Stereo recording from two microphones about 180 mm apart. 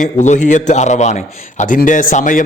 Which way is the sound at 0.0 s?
40° left (ahead or behind).